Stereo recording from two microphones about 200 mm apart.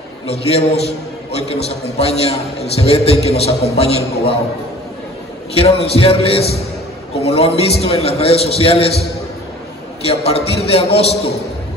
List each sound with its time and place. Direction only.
0.3 s a man's voice: 30° left (ahead or behind)
5.5 s a man's voice: 30° left (ahead or behind)
10.0 s a man's voice: 30° left (ahead or behind)